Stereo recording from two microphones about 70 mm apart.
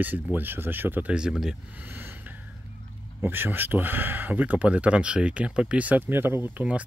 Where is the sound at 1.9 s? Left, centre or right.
Right.